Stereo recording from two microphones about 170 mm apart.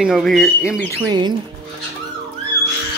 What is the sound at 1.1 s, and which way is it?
Speech, 25° right (ahead or behind).